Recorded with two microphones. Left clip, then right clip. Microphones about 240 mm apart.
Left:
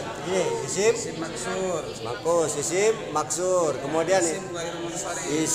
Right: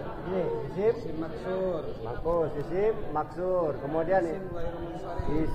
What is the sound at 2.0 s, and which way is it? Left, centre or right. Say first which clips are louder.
A man's voice: left 5 dB; centre.